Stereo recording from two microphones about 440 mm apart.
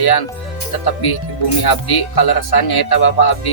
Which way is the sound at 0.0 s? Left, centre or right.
Left.